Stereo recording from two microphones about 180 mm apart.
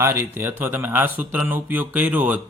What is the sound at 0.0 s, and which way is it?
Speech, 15° right (ahead or behind).